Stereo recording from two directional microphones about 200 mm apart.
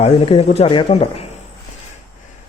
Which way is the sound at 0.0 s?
30° left (ahead or behind).